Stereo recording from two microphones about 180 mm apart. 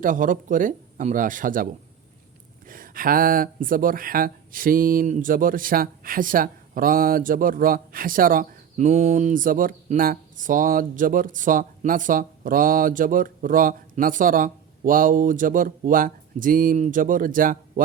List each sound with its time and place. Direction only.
0.0 s speech: 50° right (ahead or behind)